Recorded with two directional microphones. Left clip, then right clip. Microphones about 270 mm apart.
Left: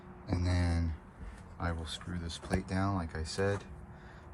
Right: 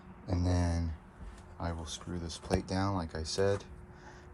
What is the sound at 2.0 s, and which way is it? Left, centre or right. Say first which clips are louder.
Speech: right 5 dB; centre.